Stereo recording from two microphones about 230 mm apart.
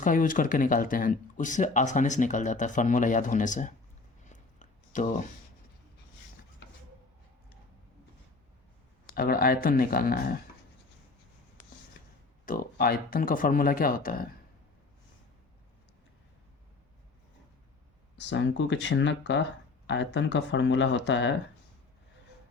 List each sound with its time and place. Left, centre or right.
0.0 s speech: left
4.3 s a sound: left
9.0 s speech: left
12.5 s speech: left
18.2 s speech: left